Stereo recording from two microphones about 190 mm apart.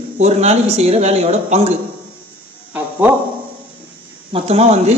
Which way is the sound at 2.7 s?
10° right (ahead or behind).